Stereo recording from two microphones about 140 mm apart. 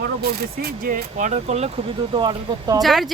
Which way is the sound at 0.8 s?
70° right (ahead or behind).